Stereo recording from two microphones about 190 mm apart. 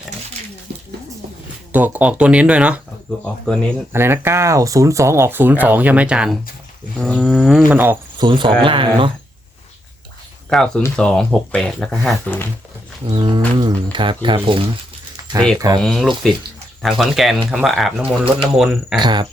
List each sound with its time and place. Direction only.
1.7 s speech: 10° right (ahead or behind)
3.2 s speech: 5° left (ahead or behind)
3.9 s speech: 10° right (ahead or behind)
8.2 s speech: 25° right (ahead or behind)
10.5 s speech: 5° left (ahead or behind)
13.1 s speech: 25° right (ahead or behind)
15.1 s a sound: 20° right (ahead or behind)
15.5 s speech: 20° right (ahead or behind)
15.8 s speech: centre (ahead or behind)
18.9 s speech: 25° right (ahead or behind)